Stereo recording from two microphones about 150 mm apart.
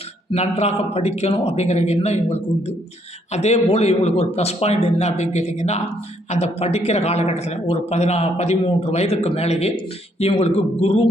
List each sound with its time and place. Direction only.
0.3 s a man's voice: 45° left (ahead or behind)